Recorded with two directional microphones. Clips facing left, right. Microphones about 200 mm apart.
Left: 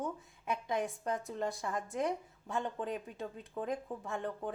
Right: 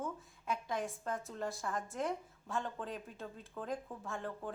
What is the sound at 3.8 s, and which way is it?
Speech, 20° left (ahead or behind).